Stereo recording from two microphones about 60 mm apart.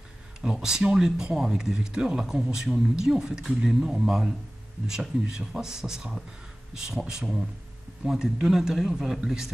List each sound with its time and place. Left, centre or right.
0.4 s speech: centre
5.3 s speech: centre